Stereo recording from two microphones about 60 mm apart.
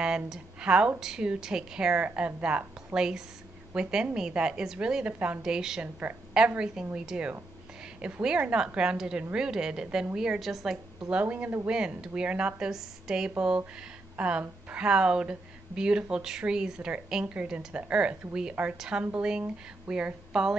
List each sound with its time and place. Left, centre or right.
0.0 s speech: centre
5.4 s a woman's voice: centre
11.1 s speech: right
14.1 s speech: centre